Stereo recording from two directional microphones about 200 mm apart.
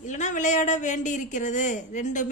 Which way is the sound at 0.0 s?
40° left (ahead or behind).